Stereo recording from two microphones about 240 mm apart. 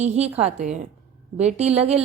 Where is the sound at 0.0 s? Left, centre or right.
Right.